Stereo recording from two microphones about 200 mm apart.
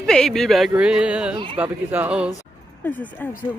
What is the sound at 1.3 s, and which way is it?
Speech, 25° right (ahead or behind).